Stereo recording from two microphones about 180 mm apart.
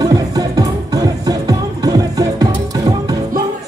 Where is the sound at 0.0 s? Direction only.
20° right (ahead or behind).